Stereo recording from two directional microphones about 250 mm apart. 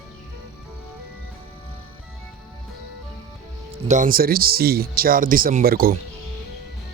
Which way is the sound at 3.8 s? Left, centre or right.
Right.